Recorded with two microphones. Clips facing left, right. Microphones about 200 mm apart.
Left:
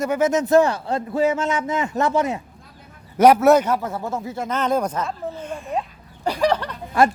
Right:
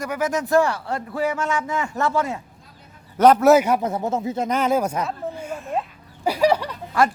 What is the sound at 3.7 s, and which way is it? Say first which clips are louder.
Speech: right 2 dB; 20° right (ahead or behind).